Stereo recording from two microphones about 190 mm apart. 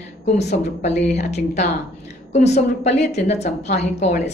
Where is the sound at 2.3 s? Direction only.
35° left (ahead or behind).